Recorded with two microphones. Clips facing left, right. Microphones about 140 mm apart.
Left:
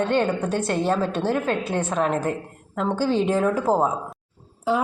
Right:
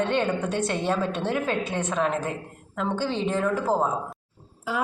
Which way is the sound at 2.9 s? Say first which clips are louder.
Left 5 dB; 5° left (ahead or behind).